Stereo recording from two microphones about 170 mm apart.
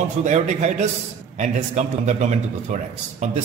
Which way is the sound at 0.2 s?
40° right (ahead or behind).